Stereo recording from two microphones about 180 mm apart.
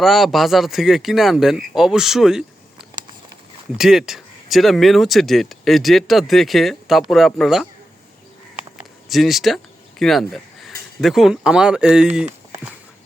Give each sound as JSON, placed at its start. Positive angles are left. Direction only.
{"t": 0.0, "sound": "speech", "side_deg": 0}
{"t": 9.0, "sound": "speech", "side_deg": 0}